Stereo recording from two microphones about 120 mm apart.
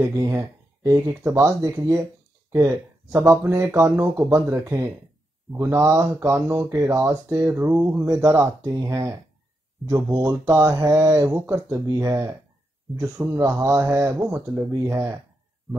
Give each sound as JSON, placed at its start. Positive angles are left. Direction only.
{"t": 0.0, "sound": "speech", "side_deg": -25}
{"t": 14.9, "sound": "speech", "side_deg": -25}